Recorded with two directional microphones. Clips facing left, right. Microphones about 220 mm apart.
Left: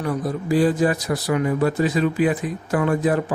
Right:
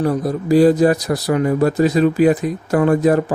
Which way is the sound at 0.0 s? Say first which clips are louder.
Right 6 dB; 35° right (ahead or behind).